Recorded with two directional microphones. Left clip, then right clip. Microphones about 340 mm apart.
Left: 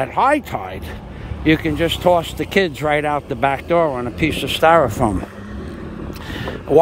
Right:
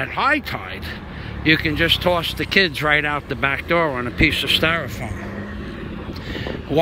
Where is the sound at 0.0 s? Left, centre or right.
Centre.